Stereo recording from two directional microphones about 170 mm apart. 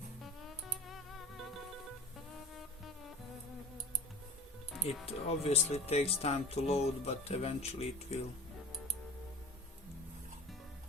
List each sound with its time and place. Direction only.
0.2 s music: centre (ahead or behind)
5.0 s speech: 35° left (ahead or behind)